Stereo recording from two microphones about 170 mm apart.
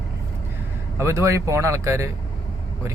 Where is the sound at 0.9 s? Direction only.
15° right (ahead or behind).